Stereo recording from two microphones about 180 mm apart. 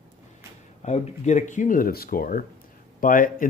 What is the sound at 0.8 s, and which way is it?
Speech, 40° left (ahead or behind).